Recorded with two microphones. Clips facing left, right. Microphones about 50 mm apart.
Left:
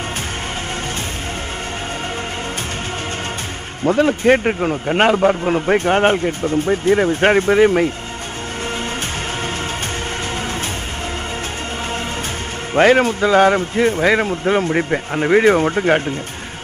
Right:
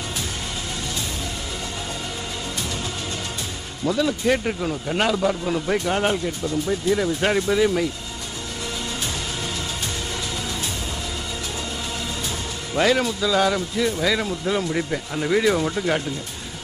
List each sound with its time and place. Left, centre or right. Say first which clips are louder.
3.8 s speech: left 7 dB; left
12.7 s speech: left 7 dB; left